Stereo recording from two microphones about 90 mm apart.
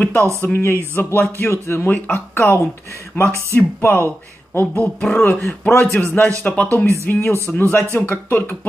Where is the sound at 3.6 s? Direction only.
25° left (ahead or behind).